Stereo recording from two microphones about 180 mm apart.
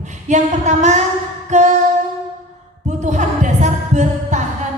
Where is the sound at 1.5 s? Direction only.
40° right (ahead or behind).